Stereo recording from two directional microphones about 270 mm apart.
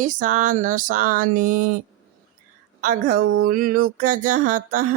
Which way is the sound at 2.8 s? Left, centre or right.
Right.